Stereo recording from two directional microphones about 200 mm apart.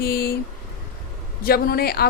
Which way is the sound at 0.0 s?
50° left (ahead or behind).